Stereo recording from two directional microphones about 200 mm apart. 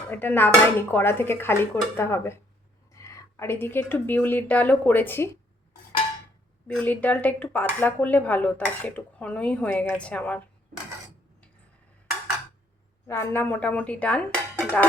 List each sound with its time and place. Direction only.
0.1 s speech: 10° left (ahead or behind)
6.7 s speech: 5° left (ahead or behind)
13.1 s speech: 10° left (ahead or behind)
14.6 s a sound: 5° left (ahead or behind)